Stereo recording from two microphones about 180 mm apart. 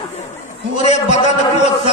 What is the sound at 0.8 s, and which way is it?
Speech, 40° left (ahead or behind).